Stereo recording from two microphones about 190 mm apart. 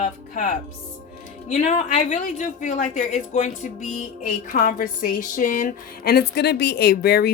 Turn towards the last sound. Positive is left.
turn(degrees=55)  # may be behind; listen again after turning